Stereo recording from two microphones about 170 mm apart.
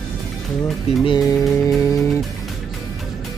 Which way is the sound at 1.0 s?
25° left (ahead or behind).